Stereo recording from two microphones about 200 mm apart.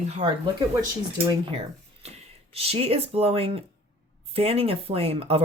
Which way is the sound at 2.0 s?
30° right (ahead or behind).